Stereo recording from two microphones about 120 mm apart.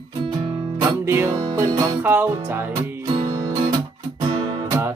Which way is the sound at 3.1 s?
35° right (ahead or behind).